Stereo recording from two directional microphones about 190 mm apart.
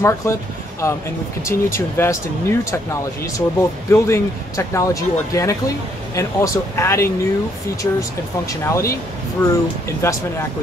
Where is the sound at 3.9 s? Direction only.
15° left (ahead or behind).